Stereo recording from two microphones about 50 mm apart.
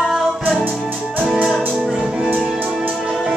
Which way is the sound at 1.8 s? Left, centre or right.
Centre.